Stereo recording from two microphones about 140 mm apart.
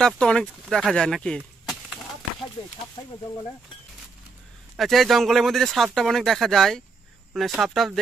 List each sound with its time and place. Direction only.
0.0 s speech: 5° left (ahead or behind)
4.7 s speech: centre (ahead or behind)